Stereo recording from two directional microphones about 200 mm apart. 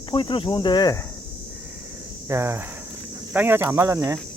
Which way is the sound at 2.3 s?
15° right (ahead or behind).